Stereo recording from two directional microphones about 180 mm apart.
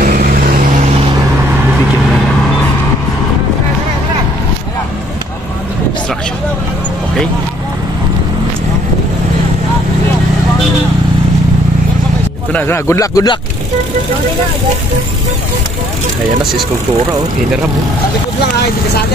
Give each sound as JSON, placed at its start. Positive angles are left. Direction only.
{"t": 0.0, "sound": "vehicle", "side_deg": -45}
{"t": 12.5, "sound": "speech", "side_deg": 15}